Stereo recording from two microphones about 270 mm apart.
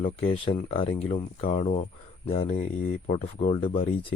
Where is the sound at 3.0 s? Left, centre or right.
Left.